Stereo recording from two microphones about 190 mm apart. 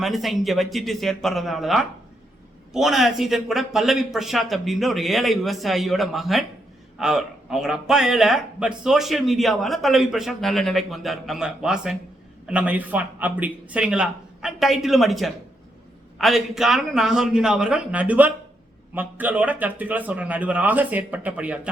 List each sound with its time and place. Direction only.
0.0 s a man's voice: centre (ahead or behind)